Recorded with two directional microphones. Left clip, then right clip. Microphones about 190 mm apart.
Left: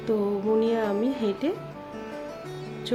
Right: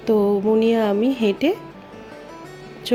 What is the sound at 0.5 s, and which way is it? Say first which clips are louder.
Speech: right 6 dB; 30° right (ahead or behind).